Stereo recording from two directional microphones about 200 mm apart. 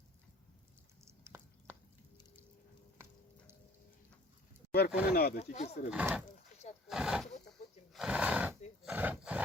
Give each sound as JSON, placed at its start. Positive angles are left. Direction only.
{"t": 1.0, "sound": "a sound", "side_deg": -15}
{"t": 4.9, "sound": "speech", "side_deg": -5}
{"t": 5.1, "sound": "speech", "side_deg": 50}
{"t": 5.4, "sound": "speech", "side_deg": 35}
{"t": 5.9, "sound": "speech", "side_deg": -5}
{"t": 6.8, "sound": "roaring cats", "side_deg": -5}
{"t": 7.9, "sound": "neigh", "side_deg": -5}
{"t": 8.8, "sound": "speech", "side_deg": -5}